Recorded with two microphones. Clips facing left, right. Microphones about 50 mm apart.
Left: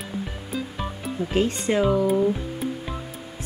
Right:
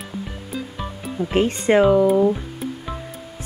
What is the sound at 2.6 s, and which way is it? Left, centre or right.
Music, centre.